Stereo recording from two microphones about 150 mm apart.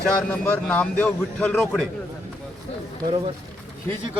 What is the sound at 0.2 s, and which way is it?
A man's voice, 10° left (ahead or behind).